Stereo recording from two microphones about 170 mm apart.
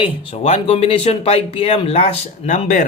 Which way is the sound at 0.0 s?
30° left (ahead or behind).